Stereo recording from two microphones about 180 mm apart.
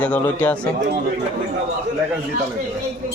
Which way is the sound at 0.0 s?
10° left (ahead or behind).